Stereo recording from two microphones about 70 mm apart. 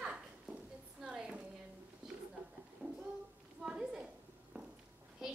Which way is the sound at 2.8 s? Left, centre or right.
Centre.